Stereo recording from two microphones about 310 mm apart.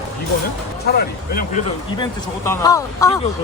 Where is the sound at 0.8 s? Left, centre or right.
Left.